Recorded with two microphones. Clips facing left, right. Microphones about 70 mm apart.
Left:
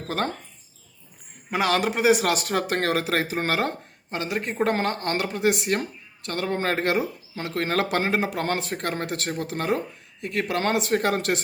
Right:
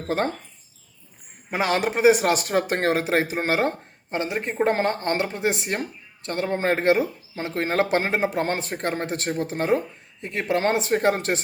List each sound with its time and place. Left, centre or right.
1.5 s speech: right